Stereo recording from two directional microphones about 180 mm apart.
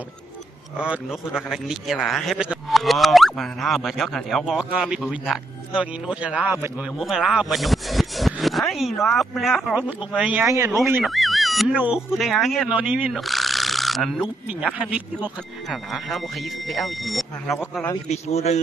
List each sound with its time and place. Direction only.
0.8 s a man's voice: 5° right (ahead or behind)
11.1 s a man's voice: centre (ahead or behind)
18.0 s a man's voice: 35° left (ahead or behind)